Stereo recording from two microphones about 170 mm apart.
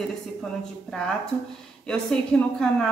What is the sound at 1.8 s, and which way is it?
A woman's voice, 5° left (ahead or behind).